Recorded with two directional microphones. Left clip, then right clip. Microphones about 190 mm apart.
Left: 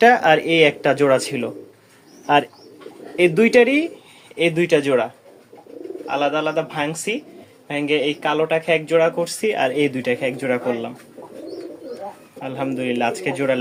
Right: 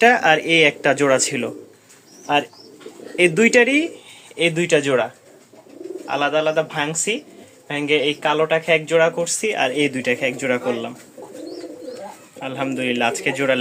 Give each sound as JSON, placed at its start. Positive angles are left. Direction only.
{"t": 0.0, "sound": "speech", "side_deg": 10}
{"t": 2.2, "sound": "speech", "side_deg": 25}
{"t": 3.2, "sound": "speech", "side_deg": 5}
{"t": 12.4, "sound": "speech", "side_deg": 5}